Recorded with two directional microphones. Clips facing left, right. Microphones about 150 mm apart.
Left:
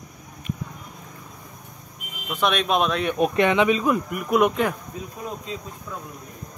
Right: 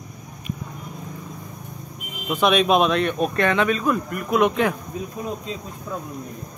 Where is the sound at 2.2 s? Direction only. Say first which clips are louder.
Right 5 dB; 5° right (ahead or behind).